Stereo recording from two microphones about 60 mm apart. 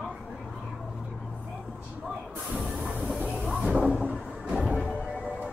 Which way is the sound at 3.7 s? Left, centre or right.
Centre.